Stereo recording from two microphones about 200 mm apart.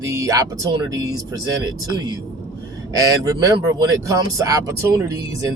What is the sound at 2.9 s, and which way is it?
Speech, 15° right (ahead or behind).